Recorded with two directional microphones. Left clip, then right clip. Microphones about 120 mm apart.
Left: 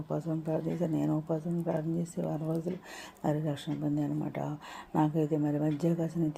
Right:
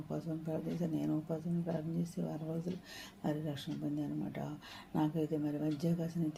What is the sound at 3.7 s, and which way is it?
Speech, 30° left (ahead or behind).